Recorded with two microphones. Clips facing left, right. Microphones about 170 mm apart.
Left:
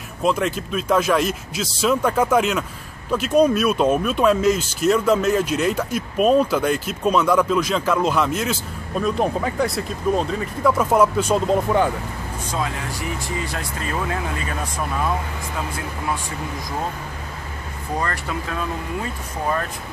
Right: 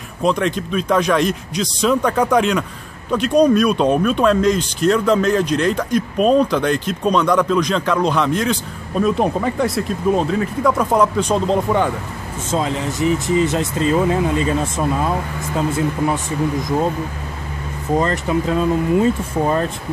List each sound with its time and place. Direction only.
0.2 s speech: 5° left (ahead or behind)
12.4 s speech: 25° right (ahead or behind)
17.9 s speech: 20° right (ahead or behind)